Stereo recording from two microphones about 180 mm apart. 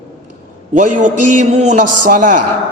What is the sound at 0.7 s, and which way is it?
A man's voice, 45° right (ahead or behind).